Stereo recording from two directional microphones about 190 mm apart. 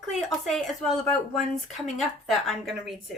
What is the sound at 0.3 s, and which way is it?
A woman's voice, centre (ahead or behind).